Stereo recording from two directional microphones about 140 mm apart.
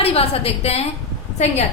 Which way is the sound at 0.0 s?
45° left (ahead or behind).